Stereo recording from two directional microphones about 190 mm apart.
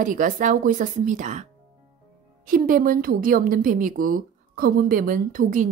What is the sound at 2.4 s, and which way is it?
A woman's voice, 45° right (ahead or behind).